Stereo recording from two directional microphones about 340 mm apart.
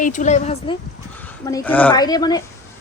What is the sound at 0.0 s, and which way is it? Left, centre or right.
Speech, left.